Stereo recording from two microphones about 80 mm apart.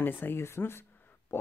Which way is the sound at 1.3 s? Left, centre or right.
Left.